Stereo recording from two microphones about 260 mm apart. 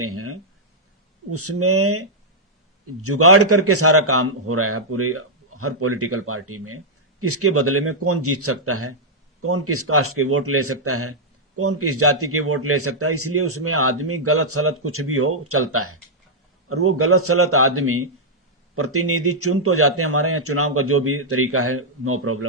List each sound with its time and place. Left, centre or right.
0.0 s a man's voice: right